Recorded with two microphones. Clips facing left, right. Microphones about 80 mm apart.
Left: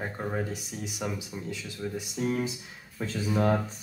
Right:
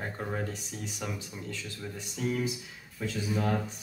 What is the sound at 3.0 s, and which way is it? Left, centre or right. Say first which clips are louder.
Speech: left 1 dB; left.